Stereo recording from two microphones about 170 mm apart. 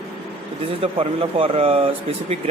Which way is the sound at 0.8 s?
35° right (ahead or behind).